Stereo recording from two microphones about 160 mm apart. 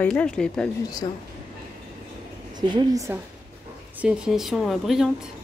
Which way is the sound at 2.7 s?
25° right (ahead or behind).